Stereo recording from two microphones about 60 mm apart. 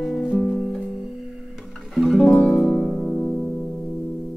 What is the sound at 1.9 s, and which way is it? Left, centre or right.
Music, centre.